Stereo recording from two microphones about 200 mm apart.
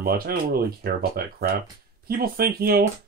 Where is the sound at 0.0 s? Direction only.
50° right (ahead or behind).